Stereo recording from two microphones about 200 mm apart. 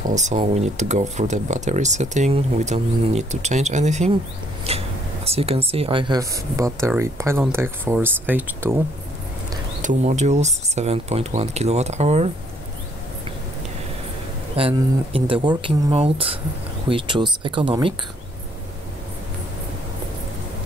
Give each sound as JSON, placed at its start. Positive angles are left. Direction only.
{"t": 0.0, "sound": "speech", "side_deg": -35}
{"t": 9.8, "sound": "speech", "side_deg": -40}
{"t": 14.6, "sound": "speech", "side_deg": -25}